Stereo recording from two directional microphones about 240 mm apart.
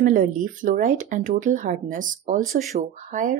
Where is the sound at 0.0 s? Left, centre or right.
Right.